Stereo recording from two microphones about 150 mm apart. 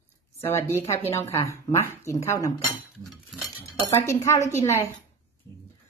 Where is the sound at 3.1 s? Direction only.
Centre (ahead or behind).